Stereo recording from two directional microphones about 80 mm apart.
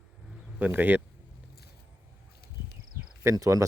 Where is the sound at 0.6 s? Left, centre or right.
Right.